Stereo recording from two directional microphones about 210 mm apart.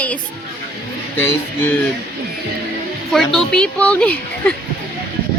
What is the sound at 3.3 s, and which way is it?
Speech, 5° left (ahead or behind).